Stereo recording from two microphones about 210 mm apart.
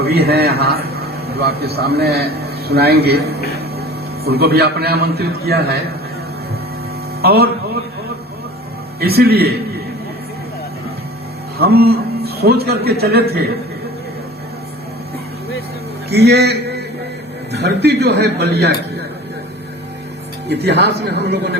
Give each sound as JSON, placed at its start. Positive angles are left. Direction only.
{"t": 0.0, "sound": "a man's voice", "side_deg": -50}
{"t": 7.2, "sound": "speech", "side_deg": -45}
{"t": 9.0, "sound": "a man's voice", "side_deg": -45}
{"t": 11.5, "sound": "a sound", "side_deg": -45}
{"t": 12.6, "sound": "a man's voice", "side_deg": -50}
{"t": 16.0, "sound": "a sound", "side_deg": -50}
{"t": 17.5, "sound": "a man's voice", "side_deg": -55}
{"t": 20.5, "sound": "a man's voice", "side_deg": -50}